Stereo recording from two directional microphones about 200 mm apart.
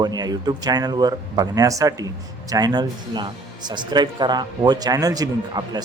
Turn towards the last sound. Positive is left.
turn(degrees=-20)  # may be behind; listen again after turning